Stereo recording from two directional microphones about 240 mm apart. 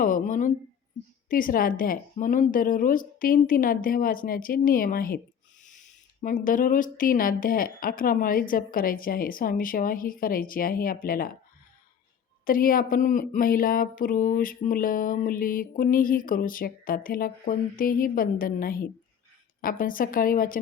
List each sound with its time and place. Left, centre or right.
0.0 s speech: left
6.2 s speech: left
12.5 s speech: left